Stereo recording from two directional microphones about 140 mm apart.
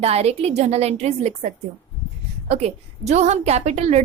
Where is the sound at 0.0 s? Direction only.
50° right (ahead or behind).